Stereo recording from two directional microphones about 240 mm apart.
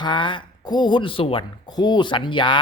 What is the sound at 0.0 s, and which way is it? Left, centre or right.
Speech, centre.